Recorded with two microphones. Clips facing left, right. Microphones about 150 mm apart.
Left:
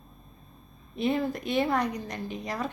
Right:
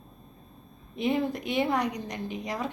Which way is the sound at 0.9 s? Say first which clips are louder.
Even; 15° right (ahead or behind).